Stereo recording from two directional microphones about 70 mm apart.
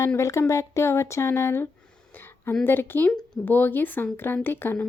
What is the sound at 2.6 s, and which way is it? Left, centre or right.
Speech, left.